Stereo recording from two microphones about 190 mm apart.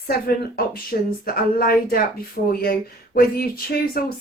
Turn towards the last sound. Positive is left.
turn(degrees=50)  # may be behind; listen again after turning